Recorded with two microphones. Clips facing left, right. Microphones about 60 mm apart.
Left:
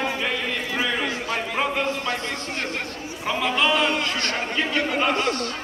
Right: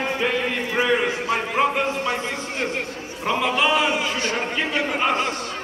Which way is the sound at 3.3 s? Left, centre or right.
Centre.